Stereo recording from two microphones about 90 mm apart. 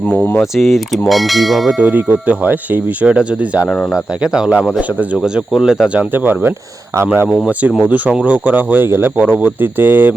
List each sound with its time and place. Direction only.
0.5 s mechanisms: centre (ahead or behind)
1.8 s speech: 20° right (ahead or behind)
5.1 s mechanisms: 5° right (ahead or behind)
6.0 s speech: 20° right (ahead or behind)
7.3 s mechanisms: centre (ahead or behind)
7.8 s speech: 15° right (ahead or behind)